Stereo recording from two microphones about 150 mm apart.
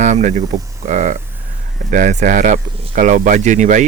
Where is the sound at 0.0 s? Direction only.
50° right (ahead or behind).